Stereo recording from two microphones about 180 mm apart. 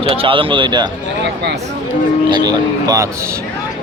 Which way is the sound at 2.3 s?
20° right (ahead or behind).